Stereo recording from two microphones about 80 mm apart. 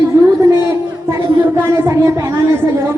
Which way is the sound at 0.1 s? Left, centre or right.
Right.